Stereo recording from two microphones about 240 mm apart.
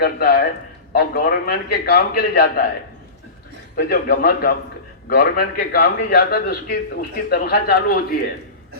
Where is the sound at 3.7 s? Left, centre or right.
Left.